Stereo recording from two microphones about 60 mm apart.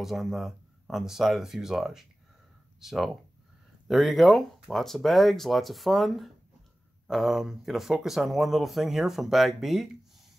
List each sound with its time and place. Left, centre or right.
0.0 s speech: centre